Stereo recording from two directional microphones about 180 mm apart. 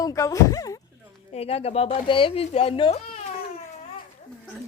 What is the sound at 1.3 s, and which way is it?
Speech, 35° left (ahead or behind).